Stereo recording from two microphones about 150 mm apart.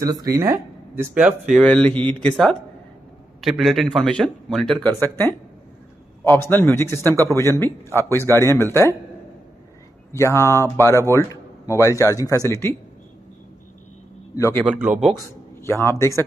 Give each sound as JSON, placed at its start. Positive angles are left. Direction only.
{"t": 0.0, "sound": "speech", "side_deg": -25}
{"t": 1.6, "sound": "speech", "side_deg": 5}
{"t": 10.1, "sound": "speech", "side_deg": 20}
{"t": 14.3, "sound": "a man's voice", "side_deg": 20}
{"t": 14.7, "sound": "speech", "side_deg": -5}
{"t": 15.6, "sound": "speech", "side_deg": 20}